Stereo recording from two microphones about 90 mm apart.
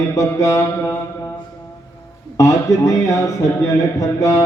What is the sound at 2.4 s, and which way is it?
A man's voice, 35° left (ahead or behind).